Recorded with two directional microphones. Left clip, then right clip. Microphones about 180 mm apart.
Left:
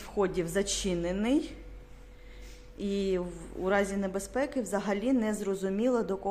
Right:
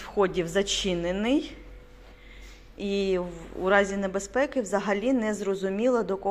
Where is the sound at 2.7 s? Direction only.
15° left (ahead or behind).